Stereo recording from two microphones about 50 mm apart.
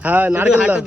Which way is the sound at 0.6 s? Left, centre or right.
Right.